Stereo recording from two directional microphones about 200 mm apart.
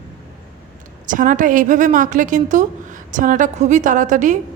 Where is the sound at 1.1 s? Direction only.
40° right (ahead or behind).